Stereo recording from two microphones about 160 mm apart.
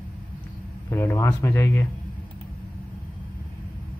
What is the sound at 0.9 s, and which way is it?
Speech, 15° left (ahead or behind).